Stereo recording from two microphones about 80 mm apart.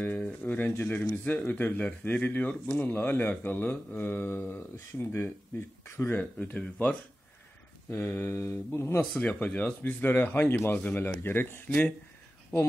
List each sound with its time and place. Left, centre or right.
0.0 s speech: centre
7.9 s mantra: left
9.1 s speech: centre